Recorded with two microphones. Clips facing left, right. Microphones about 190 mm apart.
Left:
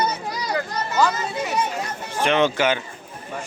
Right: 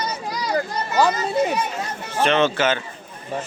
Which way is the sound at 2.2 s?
15° left (ahead or behind).